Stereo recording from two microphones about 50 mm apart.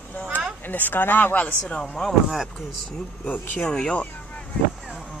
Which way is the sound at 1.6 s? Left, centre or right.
Left.